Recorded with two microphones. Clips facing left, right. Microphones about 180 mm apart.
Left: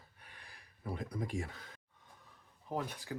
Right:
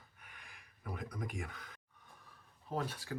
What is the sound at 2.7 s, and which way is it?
Speech, 15° left (ahead or behind).